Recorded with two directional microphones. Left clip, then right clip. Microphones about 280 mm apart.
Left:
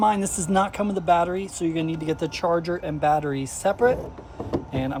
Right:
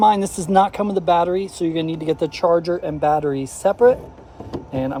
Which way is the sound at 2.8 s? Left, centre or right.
Right.